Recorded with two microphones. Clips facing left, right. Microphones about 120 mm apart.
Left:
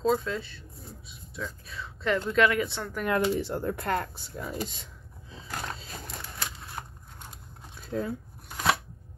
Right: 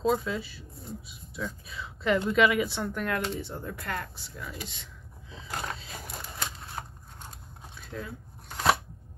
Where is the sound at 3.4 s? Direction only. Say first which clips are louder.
Left 7 dB; 70° left (ahead or behind).